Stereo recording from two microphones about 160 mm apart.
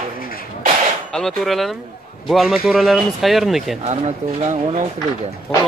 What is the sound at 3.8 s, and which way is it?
Speech, 45° right (ahead or behind).